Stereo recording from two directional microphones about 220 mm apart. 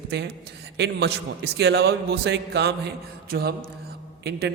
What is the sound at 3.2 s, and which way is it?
Mantra, 45° right (ahead or behind).